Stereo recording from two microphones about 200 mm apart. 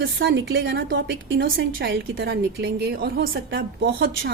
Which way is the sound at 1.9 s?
60° right (ahead or behind).